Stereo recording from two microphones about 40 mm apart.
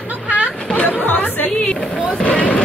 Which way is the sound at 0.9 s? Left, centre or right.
Left.